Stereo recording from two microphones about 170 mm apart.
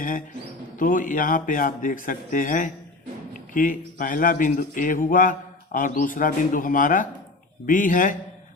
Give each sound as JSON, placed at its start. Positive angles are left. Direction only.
{"t": 0.8, "sound": "speech", "side_deg": 50}